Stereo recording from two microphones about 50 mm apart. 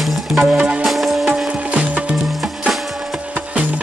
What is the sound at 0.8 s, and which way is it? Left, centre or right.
Music, centre.